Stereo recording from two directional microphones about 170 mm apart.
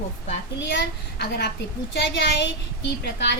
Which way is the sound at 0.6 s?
90° left.